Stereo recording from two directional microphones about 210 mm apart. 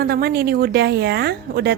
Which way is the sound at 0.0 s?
45° right (ahead or behind).